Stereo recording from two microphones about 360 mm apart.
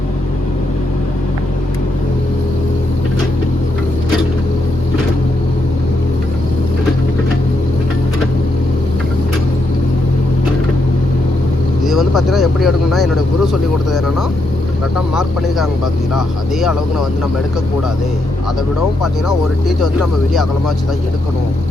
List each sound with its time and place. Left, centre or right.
11.9 s speech: centre
19.6 s speech: centre